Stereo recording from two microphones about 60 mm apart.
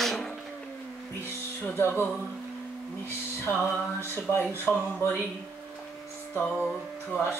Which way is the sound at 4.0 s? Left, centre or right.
Left.